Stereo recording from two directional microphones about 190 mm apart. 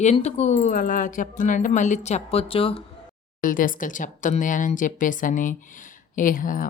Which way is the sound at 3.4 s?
45° left (ahead or behind).